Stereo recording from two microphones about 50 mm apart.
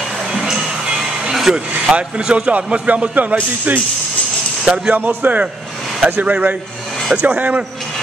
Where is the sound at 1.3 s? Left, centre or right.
Centre.